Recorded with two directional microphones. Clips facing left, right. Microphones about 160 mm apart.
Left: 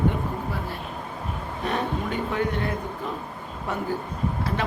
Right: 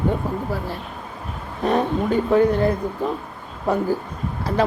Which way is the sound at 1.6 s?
35° right (ahead or behind).